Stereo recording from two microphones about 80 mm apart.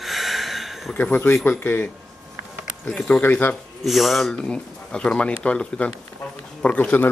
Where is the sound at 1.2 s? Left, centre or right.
Left.